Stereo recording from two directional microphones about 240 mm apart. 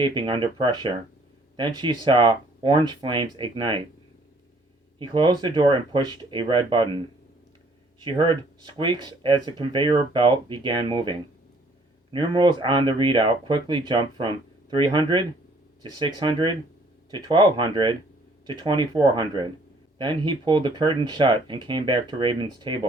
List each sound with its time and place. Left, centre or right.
0.0 s speech: centre
4.9 s speech: centre
8.0 s speech: right
12.1 s speech: centre